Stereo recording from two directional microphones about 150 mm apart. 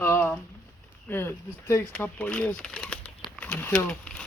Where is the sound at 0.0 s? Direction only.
15° left (ahead or behind).